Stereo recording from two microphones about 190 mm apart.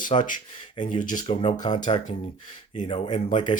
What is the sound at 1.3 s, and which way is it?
Speech, 25° left (ahead or behind).